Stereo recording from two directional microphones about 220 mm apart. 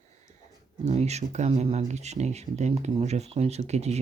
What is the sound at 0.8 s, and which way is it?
Speech, 30° right (ahead or behind).